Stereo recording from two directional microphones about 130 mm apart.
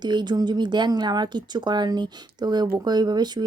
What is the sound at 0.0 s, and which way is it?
Speech, 35° right (ahead or behind).